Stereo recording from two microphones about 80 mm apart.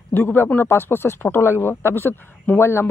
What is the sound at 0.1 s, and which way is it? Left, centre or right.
Speech, left.